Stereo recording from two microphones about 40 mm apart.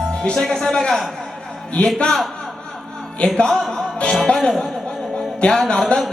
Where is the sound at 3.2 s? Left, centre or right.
Left.